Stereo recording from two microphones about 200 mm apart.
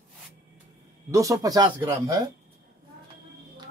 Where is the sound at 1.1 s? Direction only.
15° right (ahead or behind).